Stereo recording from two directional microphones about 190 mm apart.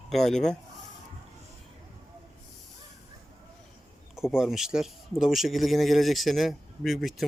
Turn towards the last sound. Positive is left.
turn(degrees=0)  # may be behind; listen again after turning